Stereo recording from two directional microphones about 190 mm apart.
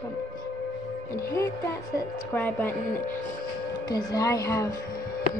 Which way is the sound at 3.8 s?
20° left (ahead or behind).